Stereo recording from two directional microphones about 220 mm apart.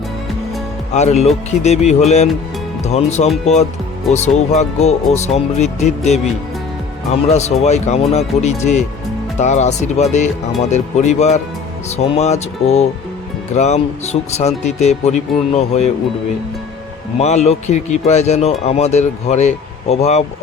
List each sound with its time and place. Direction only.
0.9 s speech: 30° left (ahead or behind)
17.2 s speech: 30° left (ahead or behind)